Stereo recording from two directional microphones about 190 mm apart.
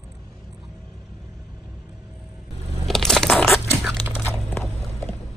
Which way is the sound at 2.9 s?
Centre (ahead or behind).